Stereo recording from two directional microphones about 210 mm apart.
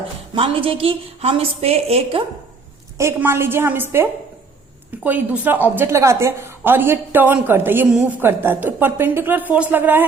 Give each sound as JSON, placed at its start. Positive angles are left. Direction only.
{"t": 0.3, "sound": "a woman's voice", "side_deg": -25}
{"t": 3.0, "sound": "a woman's voice", "side_deg": -10}